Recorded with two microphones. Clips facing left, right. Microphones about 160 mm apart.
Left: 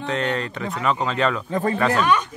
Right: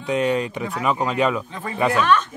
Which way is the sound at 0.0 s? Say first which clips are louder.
Right 3 dB; 10° right (ahead or behind).